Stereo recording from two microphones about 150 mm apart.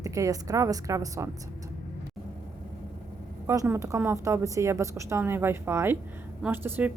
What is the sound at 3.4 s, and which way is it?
A woman's voice, 20° right (ahead or behind).